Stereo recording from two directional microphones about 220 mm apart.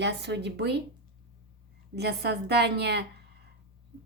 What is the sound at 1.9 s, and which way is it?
A woman's voice, 50° right (ahead or behind).